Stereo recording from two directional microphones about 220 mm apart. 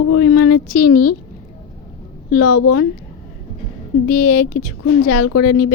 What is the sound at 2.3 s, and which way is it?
Speech, 90° left.